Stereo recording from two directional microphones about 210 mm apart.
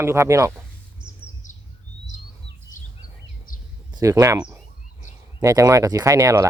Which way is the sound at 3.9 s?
15° right (ahead or behind).